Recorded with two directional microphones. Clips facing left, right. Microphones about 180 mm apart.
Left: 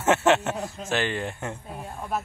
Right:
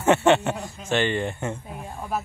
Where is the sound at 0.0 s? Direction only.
Centre (ahead or behind).